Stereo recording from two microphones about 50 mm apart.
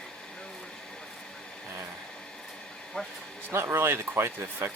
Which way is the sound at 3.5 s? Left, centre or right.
Right.